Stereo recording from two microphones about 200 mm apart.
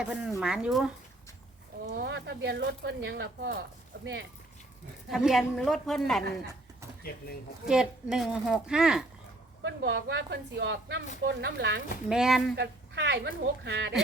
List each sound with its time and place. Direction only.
0.0 s speech: 5° right (ahead or behind)
2.0 s speech: 60° right (ahead or behind)
5.0 s speech: centre (ahead or behind)
7.6 s speech: 5° right (ahead or behind)
9.6 s speech: 60° right (ahead or behind)
12.0 s speech: centre (ahead or behind)
12.5 s speech: 60° right (ahead or behind)